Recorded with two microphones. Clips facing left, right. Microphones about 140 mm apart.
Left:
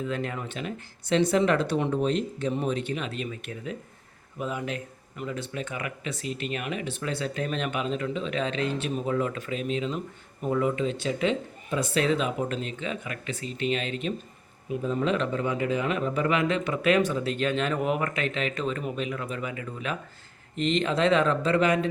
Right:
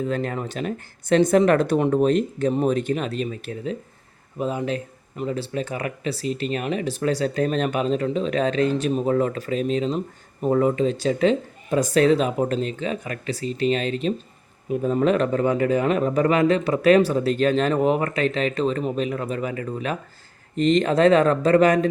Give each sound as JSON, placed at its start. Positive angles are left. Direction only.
{"t": 0.0, "sound": "speech", "side_deg": -40}
{"t": 14.7, "sound": "speech", "side_deg": -50}